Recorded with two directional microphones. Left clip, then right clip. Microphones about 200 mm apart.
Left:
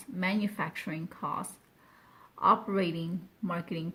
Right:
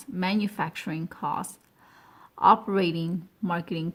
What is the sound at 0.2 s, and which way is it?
Speech, 40° right (ahead or behind).